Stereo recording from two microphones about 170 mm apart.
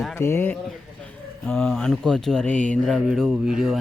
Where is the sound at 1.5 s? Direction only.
Centre (ahead or behind).